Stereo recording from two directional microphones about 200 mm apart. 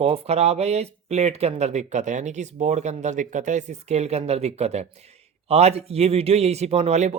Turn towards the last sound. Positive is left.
turn(degrees=-35)  # may be behind; listen again after turning